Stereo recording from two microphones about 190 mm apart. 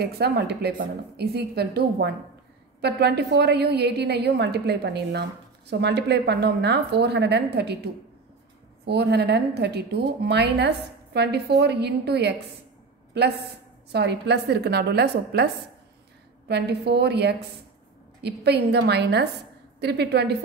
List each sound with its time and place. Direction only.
0.0 s a woman's voice: 60° right (ahead or behind)
13.9 s a woman's voice: 60° right (ahead or behind)